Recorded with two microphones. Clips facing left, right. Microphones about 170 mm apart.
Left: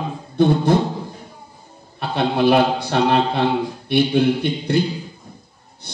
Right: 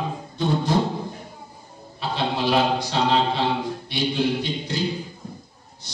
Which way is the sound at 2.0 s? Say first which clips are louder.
Left 6 dB; 55° left (ahead or behind).